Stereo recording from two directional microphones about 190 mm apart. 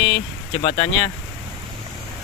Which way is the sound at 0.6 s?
35° left (ahead or behind).